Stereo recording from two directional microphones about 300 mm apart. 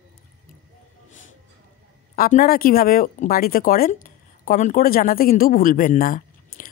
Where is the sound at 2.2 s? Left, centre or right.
Left.